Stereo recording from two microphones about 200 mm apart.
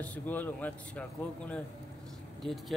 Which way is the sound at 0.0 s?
10° left (ahead or behind).